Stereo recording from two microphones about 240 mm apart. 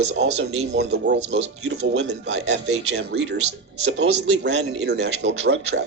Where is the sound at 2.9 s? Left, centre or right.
Right.